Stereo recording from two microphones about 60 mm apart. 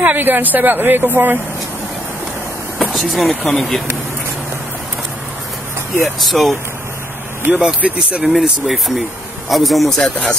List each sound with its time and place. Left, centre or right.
0.0 s speech: right
2.9 s speech: centre
6.0 s speech: centre
7.5 s speech: right
8.2 s speech: centre